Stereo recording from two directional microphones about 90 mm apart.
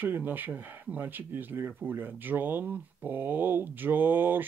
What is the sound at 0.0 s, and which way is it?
Speech, 20° right (ahead or behind).